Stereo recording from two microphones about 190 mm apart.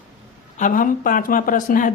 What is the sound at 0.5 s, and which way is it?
A woman's voice, 45° left (ahead or behind).